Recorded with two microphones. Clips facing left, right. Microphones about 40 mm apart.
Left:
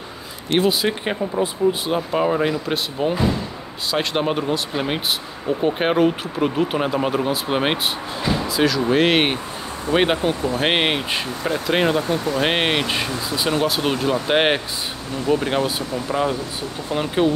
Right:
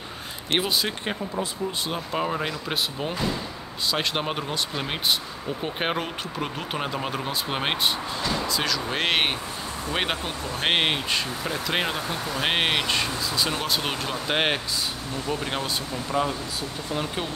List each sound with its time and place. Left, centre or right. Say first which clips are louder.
0.7 s speech: left 6 dB; centre
14.1 s speech: left 5 dB; centre